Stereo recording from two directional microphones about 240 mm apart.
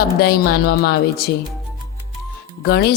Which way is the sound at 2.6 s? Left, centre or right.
Left.